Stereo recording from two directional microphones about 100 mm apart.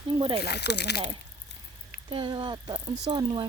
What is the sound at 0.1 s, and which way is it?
Speech, 65° right (ahead or behind).